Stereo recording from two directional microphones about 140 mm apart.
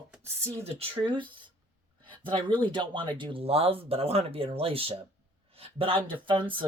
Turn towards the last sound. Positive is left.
turn(degrees=-35)  # may be behind; listen again after turning